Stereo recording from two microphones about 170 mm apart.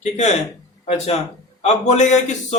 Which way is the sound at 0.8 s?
40° left (ahead or behind).